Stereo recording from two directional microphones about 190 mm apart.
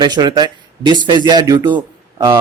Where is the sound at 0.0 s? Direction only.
20° right (ahead or behind).